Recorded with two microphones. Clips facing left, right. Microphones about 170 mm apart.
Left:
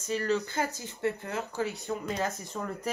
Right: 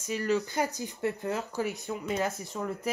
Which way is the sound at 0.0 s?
15° right (ahead or behind).